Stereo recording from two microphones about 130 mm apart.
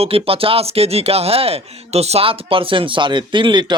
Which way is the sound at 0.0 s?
45° right (ahead or behind).